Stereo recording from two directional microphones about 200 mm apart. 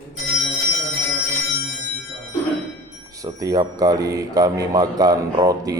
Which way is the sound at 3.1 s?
15° right (ahead or behind).